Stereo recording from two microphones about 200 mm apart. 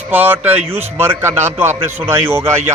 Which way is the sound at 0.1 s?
10° right (ahead or behind).